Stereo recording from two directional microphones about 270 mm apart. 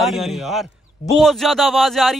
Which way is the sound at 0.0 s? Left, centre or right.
Centre.